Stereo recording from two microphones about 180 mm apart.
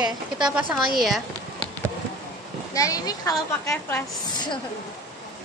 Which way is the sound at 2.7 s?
20° left (ahead or behind).